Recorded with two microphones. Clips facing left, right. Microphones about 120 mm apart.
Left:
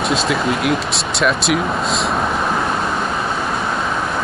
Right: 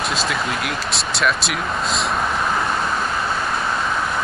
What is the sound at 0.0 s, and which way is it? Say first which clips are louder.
Speech: left 5 dB; centre (ahead or behind).